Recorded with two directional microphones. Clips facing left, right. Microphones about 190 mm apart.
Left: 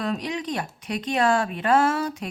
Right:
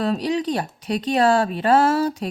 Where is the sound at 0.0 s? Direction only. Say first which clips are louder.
Right 6 dB; 35° right (ahead or behind).